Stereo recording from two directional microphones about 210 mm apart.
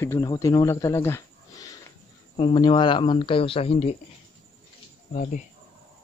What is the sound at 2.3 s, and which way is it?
Speech, 20° left (ahead or behind).